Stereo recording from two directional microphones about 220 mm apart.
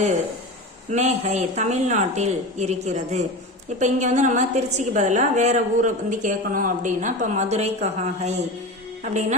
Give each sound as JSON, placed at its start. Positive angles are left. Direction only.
{"t": 0.9, "sound": "a woman's voice", "side_deg": -30}